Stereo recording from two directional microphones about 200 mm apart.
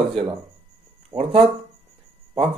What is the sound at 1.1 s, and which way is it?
Speech, 5° right (ahead or behind).